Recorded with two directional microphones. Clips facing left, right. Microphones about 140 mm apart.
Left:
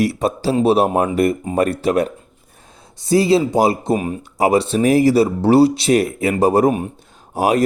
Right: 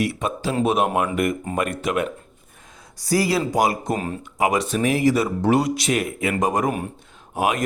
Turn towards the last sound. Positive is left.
turn(degrees=35)  # may be behind; listen again after turning